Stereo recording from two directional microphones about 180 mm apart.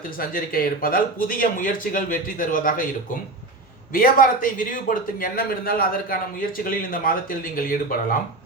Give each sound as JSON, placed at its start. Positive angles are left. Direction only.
{"t": 0.2, "sound": "a man's voice", "side_deg": 55}
{"t": 3.9, "sound": "a man's voice", "side_deg": 50}